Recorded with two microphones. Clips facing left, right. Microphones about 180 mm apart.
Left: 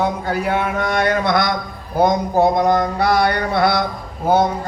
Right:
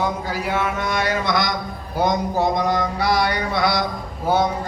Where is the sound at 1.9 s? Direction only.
55° left (ahead or behind).